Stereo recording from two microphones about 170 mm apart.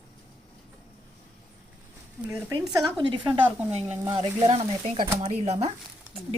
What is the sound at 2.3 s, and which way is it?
A woman's voice, 20° right (ahead or behind).